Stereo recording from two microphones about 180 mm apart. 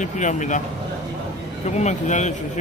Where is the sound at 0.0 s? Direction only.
45° left (ahead or behind).